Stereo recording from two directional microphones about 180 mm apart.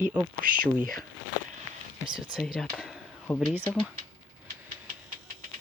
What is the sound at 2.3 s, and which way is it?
Speech, centre (ahead or behind).